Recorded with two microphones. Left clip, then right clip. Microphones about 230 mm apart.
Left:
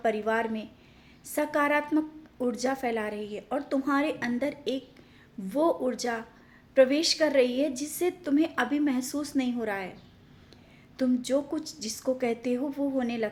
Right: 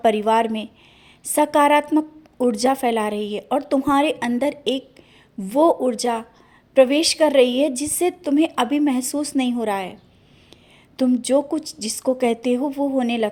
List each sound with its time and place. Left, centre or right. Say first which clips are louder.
0.0 s a woman's voice: right 10 dB; right
10.9 s a woman's voice: right 9 dB; right